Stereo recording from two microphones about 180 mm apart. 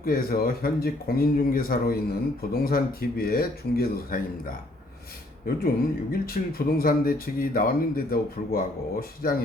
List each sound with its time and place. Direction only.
0.0 s speech: 55° left (ahead or behind)